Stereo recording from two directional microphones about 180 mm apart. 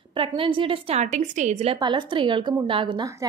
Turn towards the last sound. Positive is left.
turn(degrees=-20)  # may be behind; listen again after turning